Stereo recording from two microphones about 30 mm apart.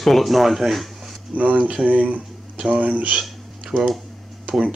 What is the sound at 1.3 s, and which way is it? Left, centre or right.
Speech, right.